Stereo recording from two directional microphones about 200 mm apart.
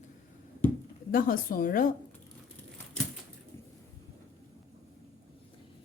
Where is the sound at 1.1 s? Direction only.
45° left (ahead or behind).